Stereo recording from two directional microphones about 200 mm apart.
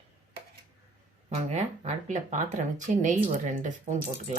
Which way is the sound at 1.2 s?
35° right (ahead or behind).